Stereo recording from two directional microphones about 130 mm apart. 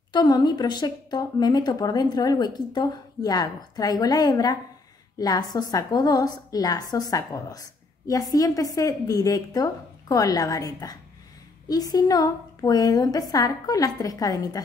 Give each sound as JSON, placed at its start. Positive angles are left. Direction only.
{"t": 0.1, "sound": "a woman's voice", "side_deg": 35}